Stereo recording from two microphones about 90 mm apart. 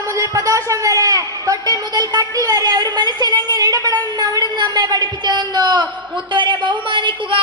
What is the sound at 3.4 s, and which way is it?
A woman's voice, 40° right (ahead or behind).